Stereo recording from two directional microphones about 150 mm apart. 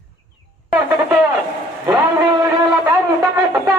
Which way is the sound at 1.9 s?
25° right (ahead or behind).